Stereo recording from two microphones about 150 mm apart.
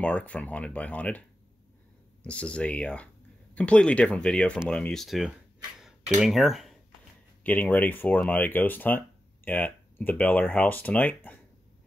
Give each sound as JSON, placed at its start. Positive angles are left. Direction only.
{"t": 0.0, "sound": "speech", "side_deg": 10}
{"t": 2.2, "sound": "speech", "side_deg": 10}
{"t": 5.8, "sound": "a sound", "side_deg": 0}
{"t": 7.4, "sound": "speech", "side_deg": 10}